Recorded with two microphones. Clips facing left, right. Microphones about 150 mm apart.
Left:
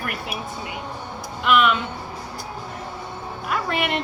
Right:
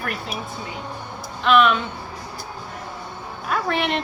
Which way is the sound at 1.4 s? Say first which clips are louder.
Right 2 dB; 10° left (ahead or behind).